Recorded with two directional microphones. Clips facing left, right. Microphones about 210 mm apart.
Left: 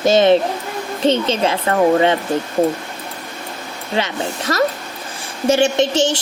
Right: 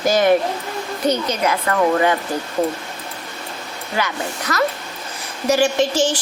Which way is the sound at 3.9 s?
25° left (ahead or behind).